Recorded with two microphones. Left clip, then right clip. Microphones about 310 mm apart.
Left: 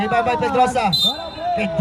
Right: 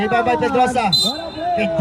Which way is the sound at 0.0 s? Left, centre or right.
Centre.